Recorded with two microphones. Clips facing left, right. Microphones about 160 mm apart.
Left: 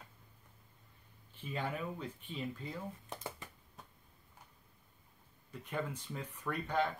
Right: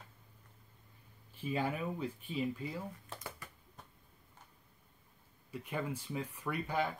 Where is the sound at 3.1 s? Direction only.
20° left (ahead or behind).